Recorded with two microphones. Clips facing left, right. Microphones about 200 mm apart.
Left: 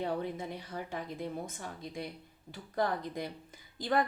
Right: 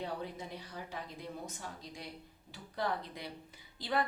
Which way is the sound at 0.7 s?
55° left (ahead or behind).